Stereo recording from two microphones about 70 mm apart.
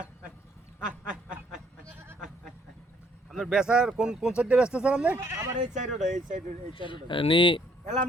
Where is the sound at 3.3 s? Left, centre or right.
Centre.